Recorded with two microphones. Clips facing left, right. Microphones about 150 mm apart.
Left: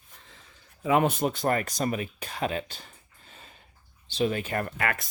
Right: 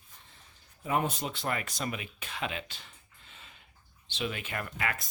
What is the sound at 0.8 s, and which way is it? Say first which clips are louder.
Speech: left 7 dB; 90° left.